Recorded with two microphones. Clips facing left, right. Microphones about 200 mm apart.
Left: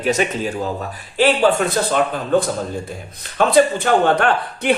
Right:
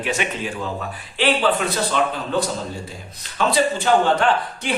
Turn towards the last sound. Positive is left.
turn(degrees=60)  # may be behind; listen again after turning